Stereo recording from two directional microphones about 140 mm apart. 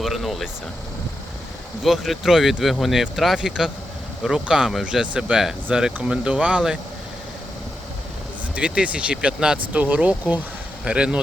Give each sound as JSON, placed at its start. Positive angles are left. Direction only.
{"t": 0.0, "sound": "vehicle", "side_deg": 0}
{"t": 1.8, "sound": "speech", "side_deg": 0}
{"t": 8.5, "sound": "speech", "side_deg": -10}